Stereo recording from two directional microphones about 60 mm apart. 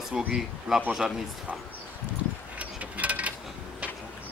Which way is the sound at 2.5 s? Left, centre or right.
Right.